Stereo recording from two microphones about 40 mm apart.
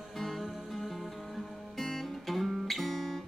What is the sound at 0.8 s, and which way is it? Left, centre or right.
Guitar, centre.